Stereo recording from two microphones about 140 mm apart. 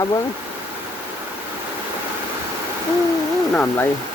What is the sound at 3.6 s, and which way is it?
Speech, 15° left (ahead or behind).